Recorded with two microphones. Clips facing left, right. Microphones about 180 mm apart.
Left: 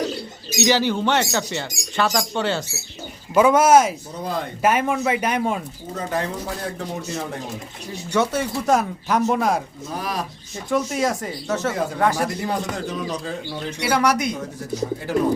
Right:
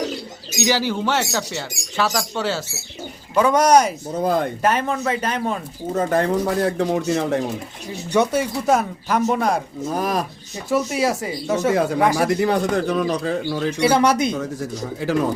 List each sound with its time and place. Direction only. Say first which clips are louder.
0.6 s speech: left 1 dB; 10° right (ahead or behind)
3.3 s speech: left 1 dB; 5° left (ahead or behind)
4.2 s speech: right 7 dB; 50° right (ahead or behind)
4.6 s a man's voice: left 1 dB; 10° left (ahead or behind)
5.9 s speech: right 6 dB; 50° right (ahead or behind)
6.6 s a man's voice: right 9 dB; 75° right (ahead or behind)
8.1 s speech: right 3 dB; 15° right (ahead or behind)
9.9 s speech: right 5 dB; 45° right (ahead or behind)
10.7 s speech: right 2 dB; 5° right (ahead or behind)
12.3 s speech: right 7 dB; 70° right (ahead or behind)
13.8 s speech: right 3 dB; 25° right (ahead or behind)